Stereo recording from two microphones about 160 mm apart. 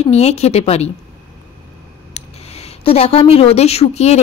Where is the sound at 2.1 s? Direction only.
40° left (ahead or behind).